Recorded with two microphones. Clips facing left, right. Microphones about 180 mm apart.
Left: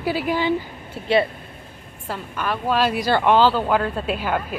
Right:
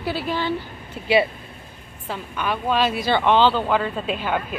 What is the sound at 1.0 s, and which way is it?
Speech, centre (ahead or behind).